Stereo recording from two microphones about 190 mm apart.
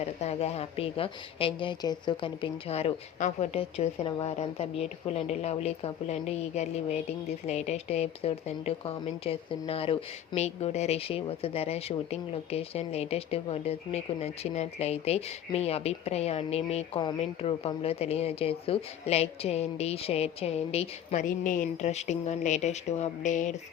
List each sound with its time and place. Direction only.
0.0 s a woman's voice: 35° left (ahead or behind)